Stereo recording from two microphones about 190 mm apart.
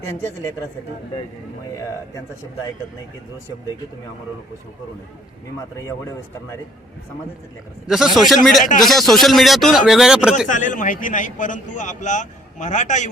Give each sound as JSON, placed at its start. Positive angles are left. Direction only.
{"t": 0.0, "sound": "a woman's voice", "side_deg": 15}
{"t": 7.9, "sound": "speech", "side_deg": 0}
{"t": 10.5, "sound": "a man's voice", "side_deg": 40}